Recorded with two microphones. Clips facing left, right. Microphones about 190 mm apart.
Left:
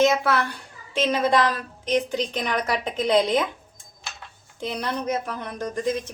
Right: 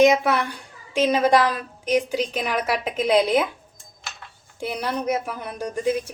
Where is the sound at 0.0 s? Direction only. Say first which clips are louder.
Right 3 dB; 15° right (ahead or behind).